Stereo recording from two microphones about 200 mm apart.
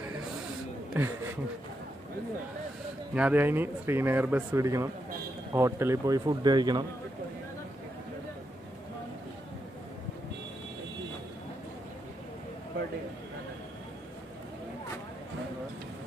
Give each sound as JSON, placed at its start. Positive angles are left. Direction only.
{"t": 1.0, "sound": "speech", "side_deg": -10}
{"t": 3.2, "sound": "speech", "side_deg": -10}